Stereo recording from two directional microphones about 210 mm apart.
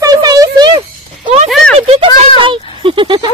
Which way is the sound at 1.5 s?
Centre (ahead or behind).